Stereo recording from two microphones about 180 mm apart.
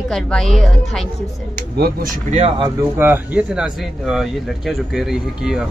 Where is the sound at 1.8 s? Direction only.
65° right (ahead or behind).